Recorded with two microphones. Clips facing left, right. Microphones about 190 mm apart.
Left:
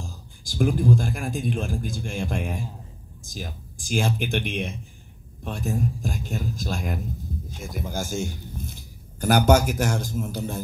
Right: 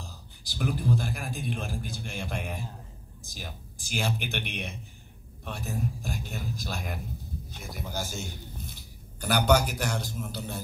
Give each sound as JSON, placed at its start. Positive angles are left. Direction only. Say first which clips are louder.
{"t": 0.0, "sound": "a man's voice", "louder": "left 6 dB", "side_deg": 45}